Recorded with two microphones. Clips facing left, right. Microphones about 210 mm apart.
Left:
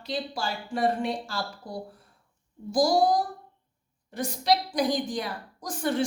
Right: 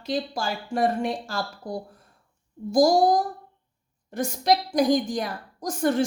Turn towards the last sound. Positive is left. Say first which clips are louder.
# right 4 dB
turn(degrees=-45)  # may be behind; listen again after turning